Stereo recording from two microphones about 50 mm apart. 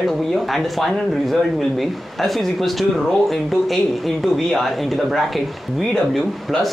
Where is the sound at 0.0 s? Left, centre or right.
Centre.